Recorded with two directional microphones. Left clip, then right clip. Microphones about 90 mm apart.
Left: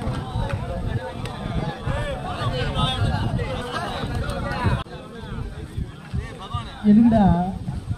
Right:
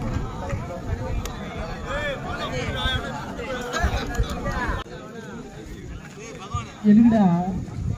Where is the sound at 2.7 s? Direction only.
20° right (ahead or behind).